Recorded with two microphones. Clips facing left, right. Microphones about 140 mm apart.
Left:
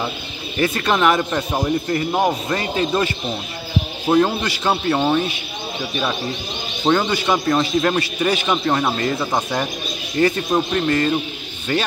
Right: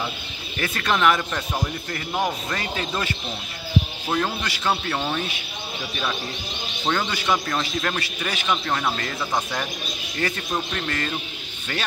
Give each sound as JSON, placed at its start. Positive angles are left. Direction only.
{"t": 0.6, "sound": "speech", "side_deg": 20}
{"t": 4.1, "sound": "speech", "side_deg": 25}
{"t": 6.9, "sound": "speech", "side_deg": 20}